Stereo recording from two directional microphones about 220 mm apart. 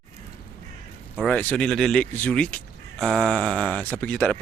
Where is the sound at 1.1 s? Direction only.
5° left (ahead or behind).